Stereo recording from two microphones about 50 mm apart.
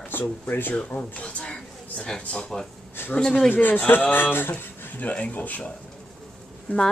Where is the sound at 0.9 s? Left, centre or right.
Left.